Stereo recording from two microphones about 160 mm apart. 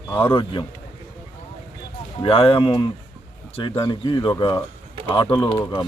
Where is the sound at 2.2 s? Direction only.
35° left (ahead or behind).